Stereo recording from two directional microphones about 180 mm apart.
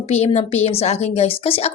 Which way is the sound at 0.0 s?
35° left (ahead or behind).